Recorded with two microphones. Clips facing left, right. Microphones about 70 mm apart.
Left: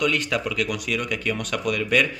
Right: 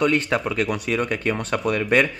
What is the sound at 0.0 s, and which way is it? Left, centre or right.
Speech, right.